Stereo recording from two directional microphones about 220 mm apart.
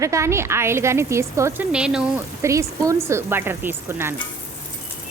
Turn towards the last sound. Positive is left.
turn(degrees=-10)  # may be behind; listen again after turning